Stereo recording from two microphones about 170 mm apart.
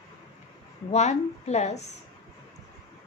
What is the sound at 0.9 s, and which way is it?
Speech, 40° left (ahead or behind).